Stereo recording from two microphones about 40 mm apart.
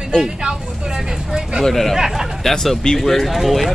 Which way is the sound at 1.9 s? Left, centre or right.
Centre.